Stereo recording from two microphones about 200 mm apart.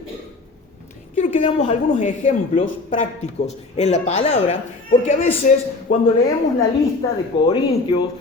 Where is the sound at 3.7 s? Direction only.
35° left (ahead or behind).